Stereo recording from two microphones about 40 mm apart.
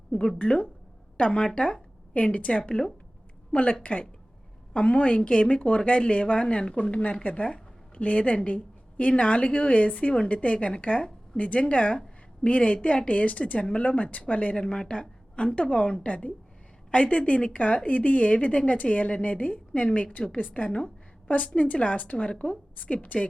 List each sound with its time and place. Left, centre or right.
0.3 s speech: left
1.4 s a woman's voice: centre
1.6 s a sound: left
2.3 s a woman's voice: left
7.2 s a woman's voice: left
14.5 s a woman's voice: left